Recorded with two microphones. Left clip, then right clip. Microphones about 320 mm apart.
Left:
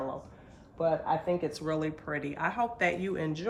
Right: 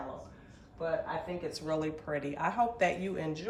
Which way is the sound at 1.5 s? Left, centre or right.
Centre.